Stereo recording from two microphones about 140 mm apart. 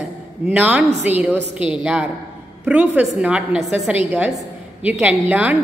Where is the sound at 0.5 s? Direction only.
10° right (ahead or behind).